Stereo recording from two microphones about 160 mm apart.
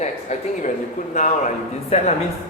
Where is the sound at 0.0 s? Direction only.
45° left (ahead or behind).